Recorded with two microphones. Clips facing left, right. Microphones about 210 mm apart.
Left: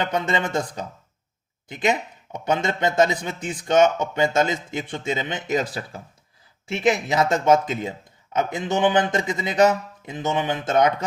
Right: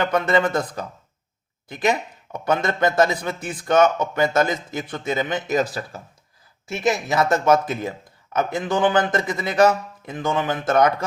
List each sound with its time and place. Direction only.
0.0 s speech: 20° left (ahead or behind)
1.6 s speech: 20° left (ahead or behind)
6.7 s speech: 20° left (ahead or behind)